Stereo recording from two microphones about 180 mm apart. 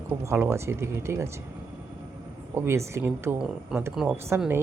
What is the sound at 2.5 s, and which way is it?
Speech, 15° right (ahead or behind).